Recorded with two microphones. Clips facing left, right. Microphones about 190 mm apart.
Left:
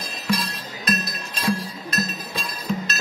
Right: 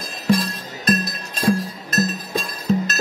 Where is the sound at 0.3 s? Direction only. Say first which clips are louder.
Right 6 dB; 50° right (ahead or behind).